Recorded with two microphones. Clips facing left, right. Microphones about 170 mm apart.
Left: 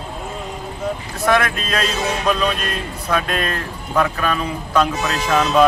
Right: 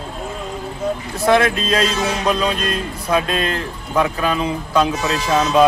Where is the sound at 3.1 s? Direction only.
25° right (ahead or behind).